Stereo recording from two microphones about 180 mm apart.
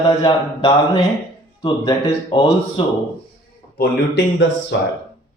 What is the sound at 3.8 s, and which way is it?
Speech, 80° left.